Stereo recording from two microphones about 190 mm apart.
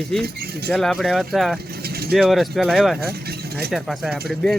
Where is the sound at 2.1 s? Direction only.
Centre (ahead or behind).